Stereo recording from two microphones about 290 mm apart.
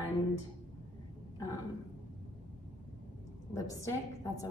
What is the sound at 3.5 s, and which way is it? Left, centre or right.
Speech, centre.